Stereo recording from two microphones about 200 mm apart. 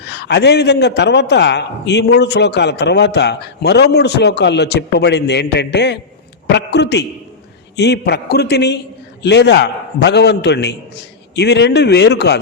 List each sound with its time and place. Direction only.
0.0 s a man's voice: 55° left (ahead or behind)